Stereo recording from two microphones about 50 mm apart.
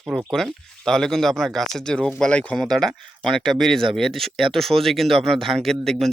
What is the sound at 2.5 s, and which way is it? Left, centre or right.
Speech, centre.